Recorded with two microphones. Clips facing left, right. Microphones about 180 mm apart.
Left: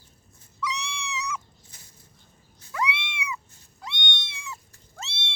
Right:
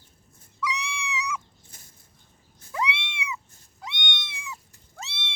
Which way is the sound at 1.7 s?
50° right (ahead or behind).